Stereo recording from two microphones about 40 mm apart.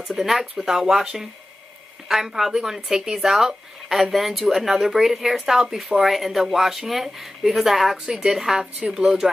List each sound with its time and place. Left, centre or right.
0.1 s speech: centre
8.7 s speech: centre